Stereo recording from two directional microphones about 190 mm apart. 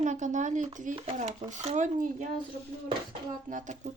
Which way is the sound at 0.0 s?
40° right (ahead or behind).